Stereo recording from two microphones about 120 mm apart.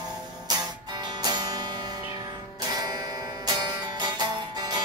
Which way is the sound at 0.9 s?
35° right (ahead or behind).